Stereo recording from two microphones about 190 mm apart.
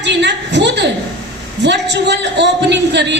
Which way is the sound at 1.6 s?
65° right (ahead or behind).